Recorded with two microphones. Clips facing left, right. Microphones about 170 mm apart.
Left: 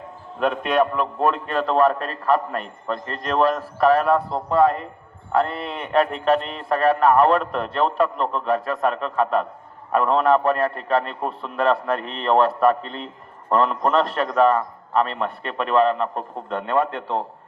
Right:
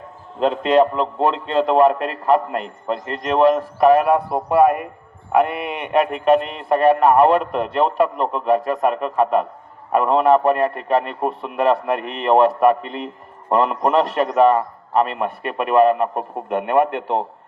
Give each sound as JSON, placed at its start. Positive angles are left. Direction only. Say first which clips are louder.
{"t": 0.3, "sound": "a man's voice", "louder": "right 4 dB", "side_deg": -25}